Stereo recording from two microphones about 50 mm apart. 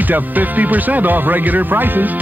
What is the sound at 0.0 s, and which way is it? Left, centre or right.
Speech, right.